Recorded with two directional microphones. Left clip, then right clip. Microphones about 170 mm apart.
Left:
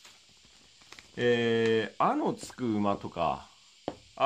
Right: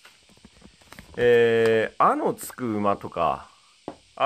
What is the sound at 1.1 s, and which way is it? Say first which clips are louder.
Speech: right 9 dB; 5° right (ahead or behind).